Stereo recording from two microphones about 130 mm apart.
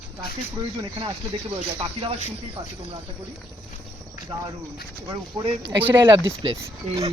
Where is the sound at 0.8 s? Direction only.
40° right (ahead or behind).